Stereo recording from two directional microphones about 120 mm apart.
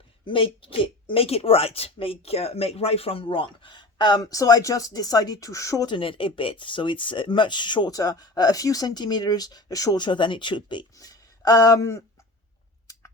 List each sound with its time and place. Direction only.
0.3 s speech: 45° left (ahead or behind)
10.9 s speech: 30° left (ahead or behind)